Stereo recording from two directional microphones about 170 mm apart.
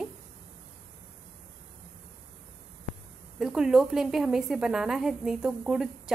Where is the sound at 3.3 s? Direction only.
5° right (ahead or behind).